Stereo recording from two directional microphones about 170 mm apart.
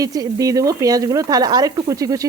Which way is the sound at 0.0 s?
20° right (ahead or behind).